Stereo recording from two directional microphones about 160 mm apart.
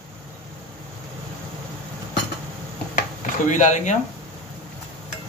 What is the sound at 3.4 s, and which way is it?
Speech, 50° left (ahead or behind).